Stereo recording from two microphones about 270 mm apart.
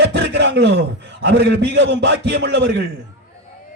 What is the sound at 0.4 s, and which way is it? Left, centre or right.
A man's voice, right.